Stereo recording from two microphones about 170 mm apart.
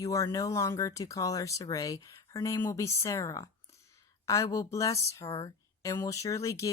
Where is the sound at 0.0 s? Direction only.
20° left (ahead or behind).